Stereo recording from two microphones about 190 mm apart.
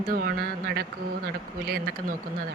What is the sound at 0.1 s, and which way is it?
Speech, 50° right (ahead or behind).